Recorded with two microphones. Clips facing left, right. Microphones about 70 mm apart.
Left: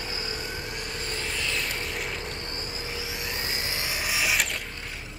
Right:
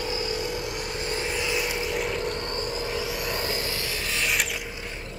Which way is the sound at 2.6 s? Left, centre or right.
Centre.